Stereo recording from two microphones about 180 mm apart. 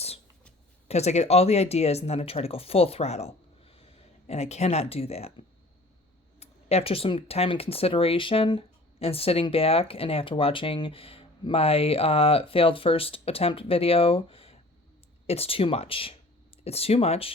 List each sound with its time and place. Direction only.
0.9 s speech: 35° left (ahead or behind)
6.4 s speech: 35° left (ahead or behind)